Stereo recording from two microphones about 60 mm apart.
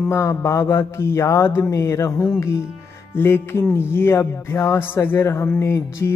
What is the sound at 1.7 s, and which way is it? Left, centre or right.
Music, left.